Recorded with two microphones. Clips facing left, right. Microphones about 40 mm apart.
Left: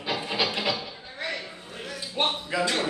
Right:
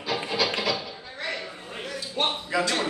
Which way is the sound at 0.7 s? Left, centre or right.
Centre.